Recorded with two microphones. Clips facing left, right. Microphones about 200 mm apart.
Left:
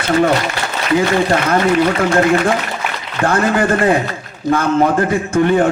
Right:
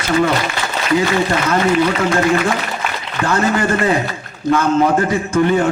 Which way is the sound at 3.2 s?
55° left (ahead or behind).